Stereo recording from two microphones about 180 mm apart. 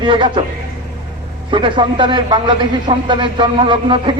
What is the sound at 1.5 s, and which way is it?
A man's voice, 25° right (ahead or behind).